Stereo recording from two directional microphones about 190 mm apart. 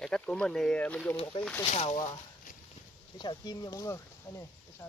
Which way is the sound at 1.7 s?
35° left (ahead or behind).